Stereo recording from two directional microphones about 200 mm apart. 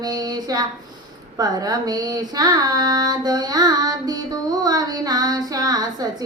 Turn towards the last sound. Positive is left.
turn(degrees=-20)  # may be behind; listen again after turning